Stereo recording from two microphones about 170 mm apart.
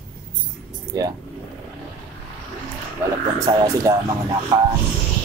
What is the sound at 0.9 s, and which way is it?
Speech, 20° right (ahead or behind).